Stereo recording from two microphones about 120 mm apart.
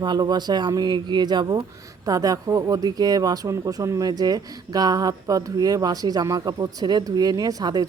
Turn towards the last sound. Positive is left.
turn(degrees=-30)  # may be behind; listen again after turning